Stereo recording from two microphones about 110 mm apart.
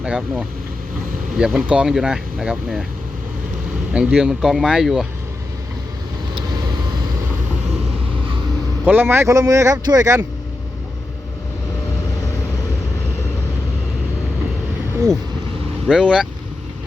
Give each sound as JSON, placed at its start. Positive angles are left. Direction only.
{"t": 0.0, "sound": "speech", "side_deg": -10}
{"t": 3.9, "sound": "speech", "side_deg": -10}
{"t": 8.8, "sound": "speech", "side_deg": -15}
{"t": 15.9, "sound": "speech", "side_deg": -5}